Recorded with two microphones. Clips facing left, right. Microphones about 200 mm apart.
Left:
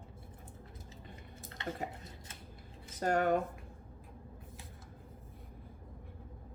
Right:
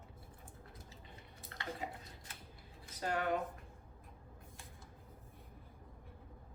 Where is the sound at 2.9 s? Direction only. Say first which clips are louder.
Left 6 dB; 45° left (ahead or behind).